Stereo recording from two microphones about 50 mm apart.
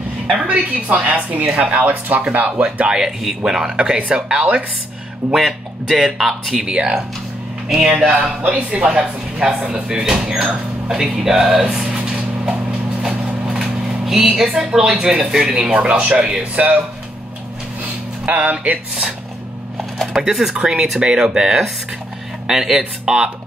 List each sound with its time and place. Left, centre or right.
0.5 s speech: right
2.9 s speech: centre
5.3 s speech: centre
8.4 s speech: right
8.6 s speech: centre
11.6 s speech: right
13.0 s a sound: centre
14.6 s speech: centre
18.2 s speech: right
20.2 s speech: centre